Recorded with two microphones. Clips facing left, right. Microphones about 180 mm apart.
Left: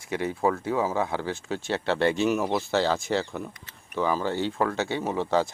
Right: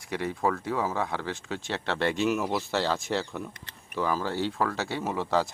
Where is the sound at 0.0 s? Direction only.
Centre (ahead or behind).